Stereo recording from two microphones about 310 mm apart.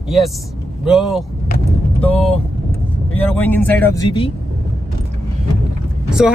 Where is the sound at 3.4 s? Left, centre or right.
Centre.